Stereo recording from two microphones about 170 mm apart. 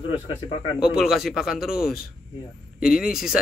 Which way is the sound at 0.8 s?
Centre (ahead or behind).